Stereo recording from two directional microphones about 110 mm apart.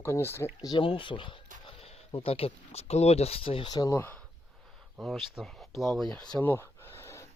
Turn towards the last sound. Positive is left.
turn(degrees=25)  # may be behind; listen again after turning